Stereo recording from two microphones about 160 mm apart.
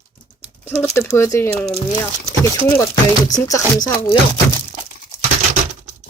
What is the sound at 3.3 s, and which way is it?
Speech, 20° left (ahead or behind).